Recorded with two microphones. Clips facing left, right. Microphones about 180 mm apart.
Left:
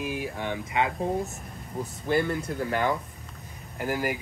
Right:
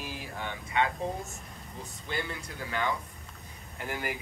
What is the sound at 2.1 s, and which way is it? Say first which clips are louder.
Speech: left 11 dB; 50° left (ahead or behind).